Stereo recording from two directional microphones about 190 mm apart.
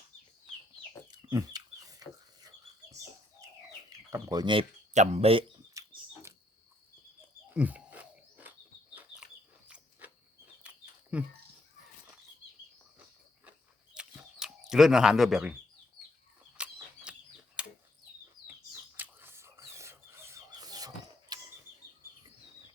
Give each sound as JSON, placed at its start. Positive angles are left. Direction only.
{"t": 1.1, "sound": "chicken", "side_deg": -20}
{"t": 4.1, "sound": "speech", "side_deg": -20}
{"t": 4.9, "sound": "speech", "side_deg": -35}
{"t": 5.8, "sound": "a sound", "side_deg": -15}
{"t": 7.5, "sound": "doorbell", "side_deg": -10}
{"t": 9.0, "sound": "bird", "side_deg": -5}
{"t": 10.6, "sound": "a sound", "side_deg": -5}
{"t": 13.9, "sound": "chicken", "side_deg": -5}
{"t": 14.7, "sound": "speech", "side_deg": 0}
{"t": 16.4, "sound": "bird", "side_deg": -10}
{"t": 17.6, "sound": "a sound", "side_deg": -5}
{"t": 18.9, "sound": "a sound", "side_deg": -10}